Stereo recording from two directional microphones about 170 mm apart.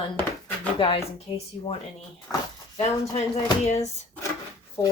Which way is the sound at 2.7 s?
40° left (ahead or behind).